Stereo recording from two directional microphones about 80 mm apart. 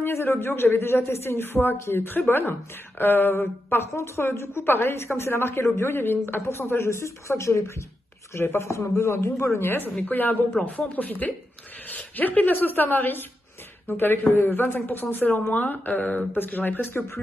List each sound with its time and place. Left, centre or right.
0.0 s a woman's voice: left